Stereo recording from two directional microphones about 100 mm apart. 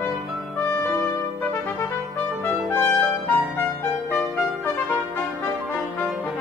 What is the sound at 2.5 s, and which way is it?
Trumpet, 20° left (ahead or behind).